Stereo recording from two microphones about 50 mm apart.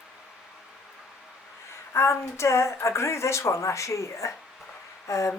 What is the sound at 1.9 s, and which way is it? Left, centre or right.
Speech, left.